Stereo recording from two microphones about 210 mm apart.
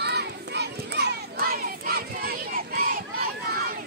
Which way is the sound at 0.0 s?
55° right (ahead or behind).